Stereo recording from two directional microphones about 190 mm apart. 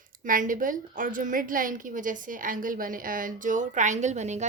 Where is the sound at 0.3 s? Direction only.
45° right (ahead or behind).